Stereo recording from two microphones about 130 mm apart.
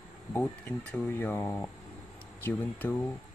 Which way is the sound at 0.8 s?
10° left (ahead or behind).